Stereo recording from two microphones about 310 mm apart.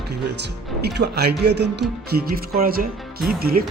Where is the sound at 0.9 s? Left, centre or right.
Right.